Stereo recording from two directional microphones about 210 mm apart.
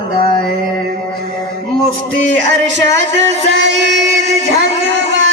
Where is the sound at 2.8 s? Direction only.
60° right (ahead or behind).